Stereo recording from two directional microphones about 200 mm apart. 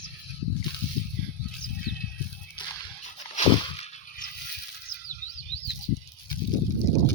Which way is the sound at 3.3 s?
35° left (ahead or behind).